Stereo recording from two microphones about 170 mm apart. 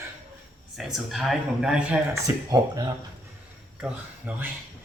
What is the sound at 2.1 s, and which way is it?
Speech, 20° right (ahead or behind).